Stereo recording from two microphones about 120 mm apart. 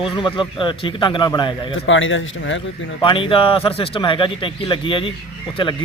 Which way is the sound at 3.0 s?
45° left (ahead or behind).